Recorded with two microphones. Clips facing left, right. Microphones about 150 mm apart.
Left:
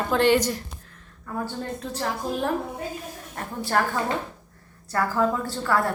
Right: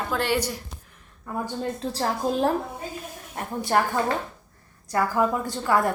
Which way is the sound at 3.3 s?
15° right (ahead or behind).